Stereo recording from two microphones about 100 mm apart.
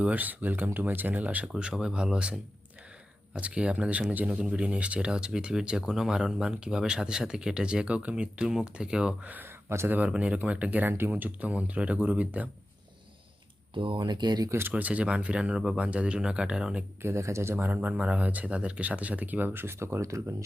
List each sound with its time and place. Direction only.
0.0 s speech: 15° right (ahead or behind)
13.7 s speech: 55° right (ahead or behind)
14.7 s speech: 15° right (ahead or behind)
17.0 s speech: 30° right (ahead or behind)